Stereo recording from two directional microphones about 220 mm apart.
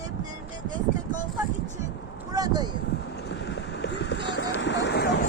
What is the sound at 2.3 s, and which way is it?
Speech, 20° right (ahead or behind).